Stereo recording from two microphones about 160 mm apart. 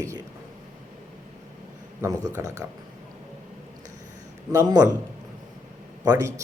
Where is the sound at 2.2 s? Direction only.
20° right (ahead or behind).